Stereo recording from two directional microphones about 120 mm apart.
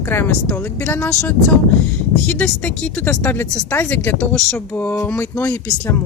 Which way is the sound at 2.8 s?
20° left (ahead or behind).